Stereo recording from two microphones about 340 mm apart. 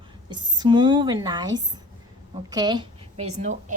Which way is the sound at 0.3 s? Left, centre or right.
Centre.